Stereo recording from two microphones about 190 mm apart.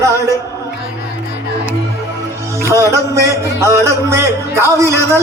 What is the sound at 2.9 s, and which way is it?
Music, 15° right (ahead or behind).